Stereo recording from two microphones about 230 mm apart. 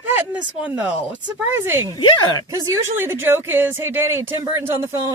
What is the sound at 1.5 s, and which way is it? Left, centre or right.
Speech, centre.